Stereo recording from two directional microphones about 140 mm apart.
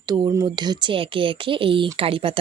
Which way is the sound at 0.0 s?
30° right (ahead or behind).